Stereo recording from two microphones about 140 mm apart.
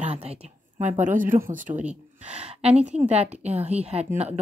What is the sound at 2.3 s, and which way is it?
A woman's voice, 50° right (ahead or behind).